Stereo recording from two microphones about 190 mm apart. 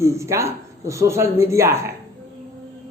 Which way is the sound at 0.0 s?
15° right (ahead or behind).